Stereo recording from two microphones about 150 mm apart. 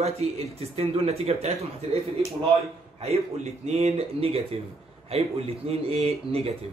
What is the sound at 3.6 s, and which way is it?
Speech, 45° right (ahead or behind).